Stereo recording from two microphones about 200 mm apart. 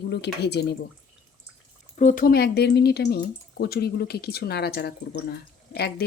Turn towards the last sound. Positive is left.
turn(degrees=55)  # may be behind; listen again after turning